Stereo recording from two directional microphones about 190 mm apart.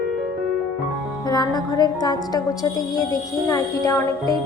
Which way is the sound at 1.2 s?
20° left (ahead or behind).